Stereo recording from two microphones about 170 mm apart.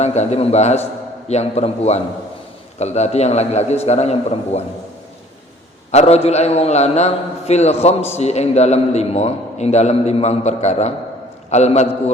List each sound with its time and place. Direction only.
0.0 s a man's voice: 40° left (ahead or behind)
5.9 s a man's voice: 40° left (ahead or behind)